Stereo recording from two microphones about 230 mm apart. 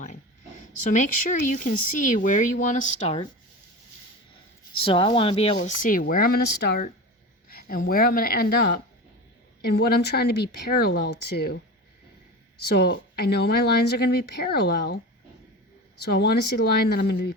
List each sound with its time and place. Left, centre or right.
0.0 s speech: left
4.7 s speech: left
12.5 s speech: left
16.0 s speech: left